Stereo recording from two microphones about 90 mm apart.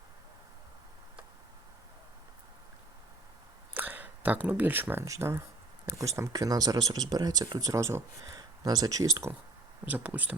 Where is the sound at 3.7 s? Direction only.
20° right (ahead or behind).